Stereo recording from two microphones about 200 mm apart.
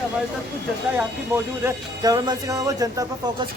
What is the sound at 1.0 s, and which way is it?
Speech, 10° right (ahead or behind).